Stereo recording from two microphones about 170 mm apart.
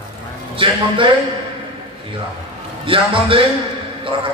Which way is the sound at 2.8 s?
30° right (ahead or behind).